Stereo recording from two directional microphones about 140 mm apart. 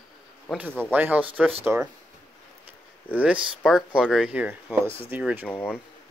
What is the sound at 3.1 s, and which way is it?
Speech, 10° right (ahead or behind).